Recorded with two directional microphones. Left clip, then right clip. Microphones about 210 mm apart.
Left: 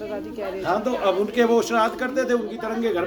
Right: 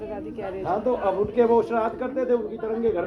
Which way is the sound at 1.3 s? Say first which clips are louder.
Right 1 dB; 30° left (ahead or behind).